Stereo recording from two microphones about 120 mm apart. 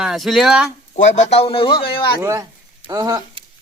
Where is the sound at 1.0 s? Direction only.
75° left (ahead or behind); by 2.1 s 50° left (ahead or behind).